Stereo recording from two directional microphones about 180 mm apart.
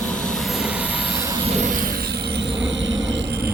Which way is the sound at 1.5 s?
45° right (ahead or behind).